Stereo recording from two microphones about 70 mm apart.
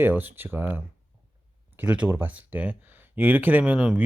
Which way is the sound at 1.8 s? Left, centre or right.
Right.